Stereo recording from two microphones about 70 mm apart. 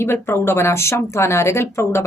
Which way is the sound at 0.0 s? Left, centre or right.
Left.